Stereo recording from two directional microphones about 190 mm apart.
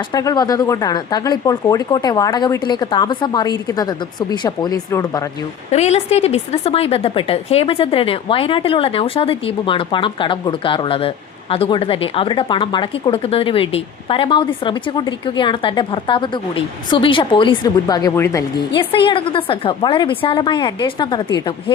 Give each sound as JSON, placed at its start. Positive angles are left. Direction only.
{"t": 0.1, "sound": "a woman's voice", "side_deg": 20}
{"t": 5.7, "sound": "a woman's voice", "side_deg": 35}
{"t": 18.8, "sound": "a woman's voice", "side_deg": 25}